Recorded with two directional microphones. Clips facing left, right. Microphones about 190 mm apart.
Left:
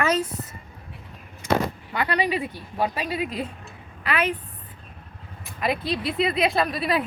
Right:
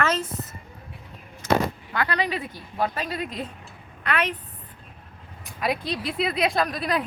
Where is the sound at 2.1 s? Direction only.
10° left (ahead or behind).